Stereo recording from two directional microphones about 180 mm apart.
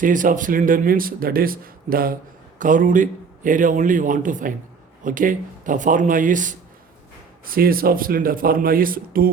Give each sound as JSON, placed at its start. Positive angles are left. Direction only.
{"t": 0.0, "sound": "speech", "side_deg": -45}